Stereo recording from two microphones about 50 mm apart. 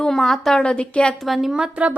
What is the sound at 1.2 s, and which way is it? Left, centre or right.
Speech, centre.